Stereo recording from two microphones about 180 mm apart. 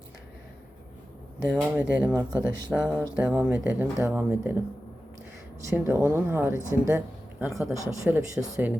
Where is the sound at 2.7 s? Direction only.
5° right (ahead or behind).